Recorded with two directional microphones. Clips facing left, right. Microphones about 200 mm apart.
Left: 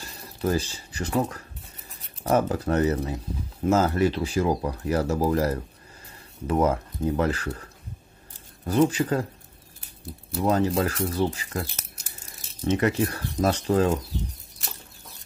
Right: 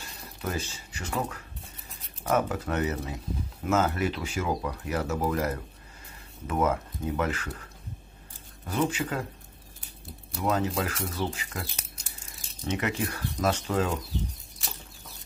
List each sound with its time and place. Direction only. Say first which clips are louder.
0.4 s speech: left 8 dB; 35° left (ahead or behind)
8.6 s speech: left 7 dB; 35° left (ahead or behind)
10.3 s speech: left 5 dB; 30° left (ahead or behind)
12.6 s speech: left 7 dB; 35° left (ahead or behind)